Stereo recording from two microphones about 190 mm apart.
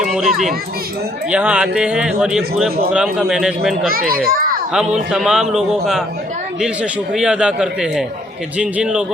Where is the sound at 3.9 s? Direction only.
50° right (ahead or behind).